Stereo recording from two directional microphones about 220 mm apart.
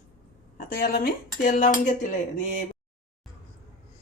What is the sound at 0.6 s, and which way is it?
Speech, 40° left (ahead or behind).